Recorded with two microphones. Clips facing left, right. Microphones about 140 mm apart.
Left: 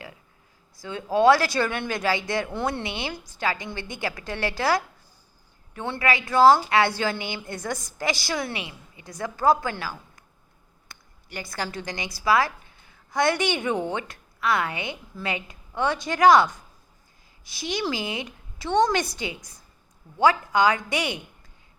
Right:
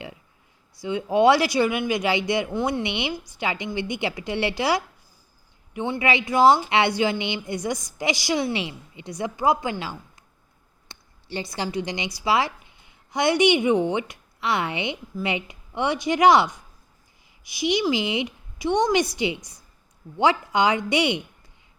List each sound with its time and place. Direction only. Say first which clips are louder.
0.8 s a woman's voice: right 2 dB; 20° right (ahead or behind)